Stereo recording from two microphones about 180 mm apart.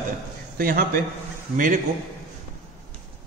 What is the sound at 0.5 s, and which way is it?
A man's voice, 55° right (ahead or behind).